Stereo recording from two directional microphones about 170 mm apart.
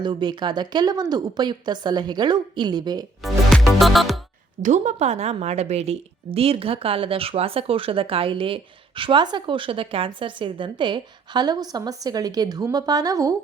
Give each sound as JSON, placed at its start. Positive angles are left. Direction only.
{"t": 0.0, "sound": "a woman's voice", "side_deg": -25}
{"t": 3.2, "sound": "music", "side_deg": 0}
{"t": 4.6, "sound": "a woman's voice", "side_deg": -45}